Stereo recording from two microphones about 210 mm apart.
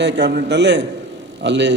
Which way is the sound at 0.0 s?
55° right (ahead or behind).